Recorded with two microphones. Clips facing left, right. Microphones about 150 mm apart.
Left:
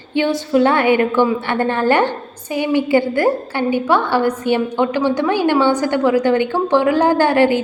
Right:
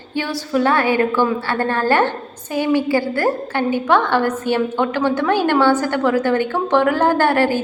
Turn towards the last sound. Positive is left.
turn(degrees=15)  # may be behind; listen again after turning